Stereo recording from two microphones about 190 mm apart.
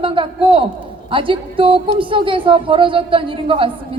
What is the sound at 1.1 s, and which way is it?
A woman's voice, 25° right (ahead or behind).